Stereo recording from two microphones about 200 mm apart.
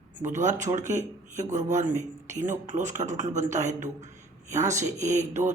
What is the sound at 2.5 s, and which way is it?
Speech, 35° right (ahead or behind).